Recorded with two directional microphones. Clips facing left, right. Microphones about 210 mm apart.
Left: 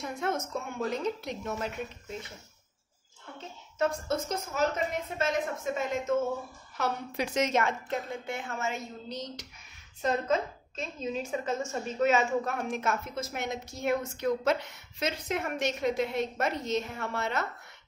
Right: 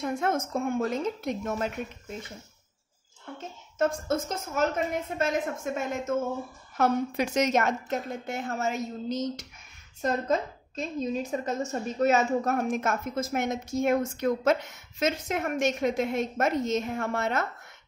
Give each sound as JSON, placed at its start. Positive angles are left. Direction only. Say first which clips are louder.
{"t": 0.0, "sound": "a woman's voice", "louder": "right 4 dB", "side_deg": -50}
{"t": 3.7, "sound": "a woman's voice", "louder": "right 3 dB", "side_deg": -50}